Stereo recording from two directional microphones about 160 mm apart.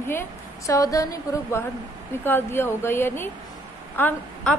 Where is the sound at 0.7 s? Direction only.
20° left (ahead or behind).